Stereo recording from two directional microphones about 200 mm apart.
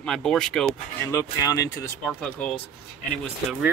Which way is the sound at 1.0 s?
15° left (ahead or behind).